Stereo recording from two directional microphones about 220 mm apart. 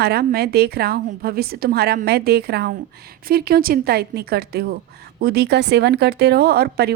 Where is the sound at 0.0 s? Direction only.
45° right (ahead or behind).